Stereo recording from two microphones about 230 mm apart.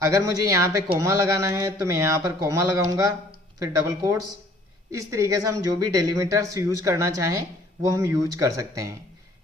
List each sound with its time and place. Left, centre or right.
0.0 s speech: centre